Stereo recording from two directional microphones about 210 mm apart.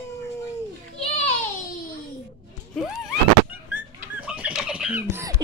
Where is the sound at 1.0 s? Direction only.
30° left (ahead or behind).